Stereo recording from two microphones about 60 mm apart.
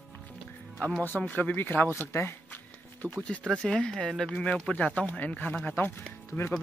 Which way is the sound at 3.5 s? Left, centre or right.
Centre.